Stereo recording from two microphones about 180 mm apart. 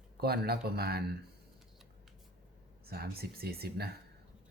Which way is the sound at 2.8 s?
60° right (ahead or behind).